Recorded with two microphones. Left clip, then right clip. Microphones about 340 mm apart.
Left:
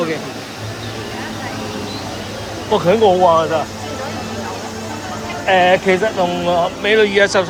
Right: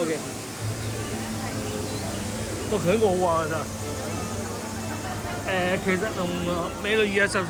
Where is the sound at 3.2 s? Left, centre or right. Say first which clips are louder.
Left 12 dB; left.